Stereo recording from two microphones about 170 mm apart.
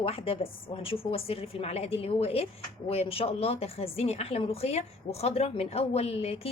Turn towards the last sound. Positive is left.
turn(degrees=35)  # may be behind; listen again after turning